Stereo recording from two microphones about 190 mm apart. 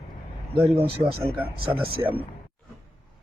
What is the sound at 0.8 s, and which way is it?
Speech, 30° right (ahead or behind).